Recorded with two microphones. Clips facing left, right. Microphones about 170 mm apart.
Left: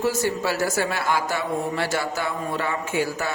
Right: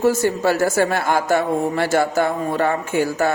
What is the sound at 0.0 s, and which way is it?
A woman's voice, 50° right (ahead or behind).